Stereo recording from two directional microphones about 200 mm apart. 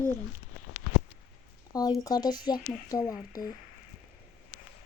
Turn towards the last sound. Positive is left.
turn(degrees=15)  # may be behind; listen again after turning